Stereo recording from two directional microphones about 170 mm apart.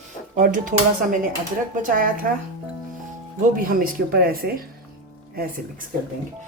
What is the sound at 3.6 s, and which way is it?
Speech, 55° right (ahead or behind).